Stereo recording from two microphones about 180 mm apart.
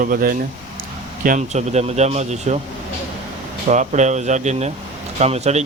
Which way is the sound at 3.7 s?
40° right (ahead or behind).